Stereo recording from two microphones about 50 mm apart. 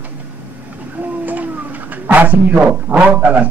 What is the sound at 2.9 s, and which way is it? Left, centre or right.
Speech, right.